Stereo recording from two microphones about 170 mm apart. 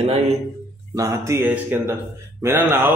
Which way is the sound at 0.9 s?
20° right (ahead or behind).